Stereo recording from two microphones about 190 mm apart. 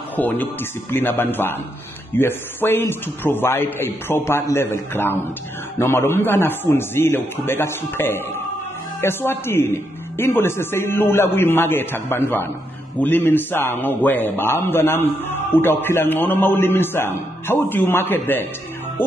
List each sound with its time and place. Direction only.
0.1 s a man's voice: 10° left (ahead or behind)